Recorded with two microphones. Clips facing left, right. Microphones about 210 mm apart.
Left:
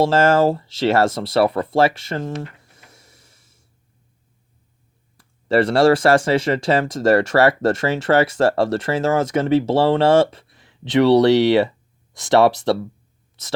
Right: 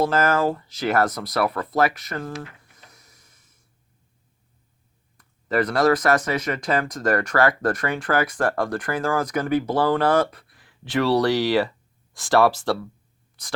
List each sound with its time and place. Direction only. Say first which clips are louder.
0.0 s speech: left 5 dB; 25° left (ahead or behind)
2.9 s a sound: left 4 dB; 30° left (ahead or behind)
5.1 s speech: left 6 dB; 30° left (ahead or behind)